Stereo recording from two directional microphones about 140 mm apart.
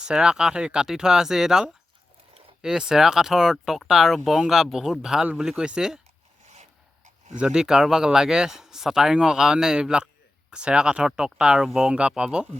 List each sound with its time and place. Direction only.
0.0 s speech: 5° right (ahead or behind)
6.5 s a sound: 55° right (ahead or behind)
7.3 s speech: 5° right (ahead or behind)